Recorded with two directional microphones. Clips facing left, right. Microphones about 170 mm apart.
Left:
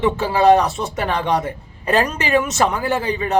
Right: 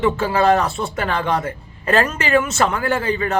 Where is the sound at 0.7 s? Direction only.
Centre (ahead or behind).